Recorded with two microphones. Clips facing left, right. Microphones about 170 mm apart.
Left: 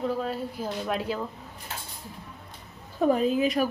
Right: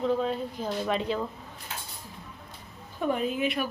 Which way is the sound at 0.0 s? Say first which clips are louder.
Right 2 dB; 5° left (ahead or behind).